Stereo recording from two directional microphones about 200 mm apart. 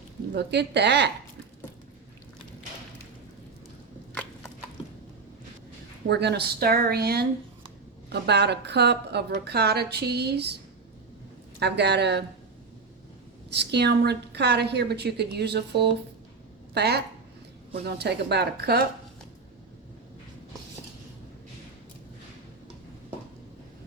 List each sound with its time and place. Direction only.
0.3 s a woman's voice: 60° right (ahead or behind)
6.1 s a woman's voice: 55° right (ahead or behind)
11.6 s a woman's voice: 55° right (ahead or behind)
13.6 s a woman's voice: 55° right (ahead or behind)